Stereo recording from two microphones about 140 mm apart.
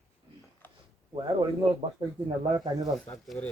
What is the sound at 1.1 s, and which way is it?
Speech, 35° right (ahead or behind).